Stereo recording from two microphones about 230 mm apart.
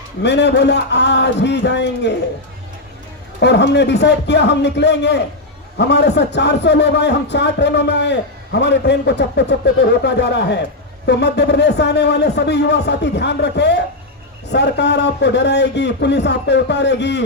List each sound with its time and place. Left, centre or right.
0.2 s a man's voice: left
3.4 s a man's voice: left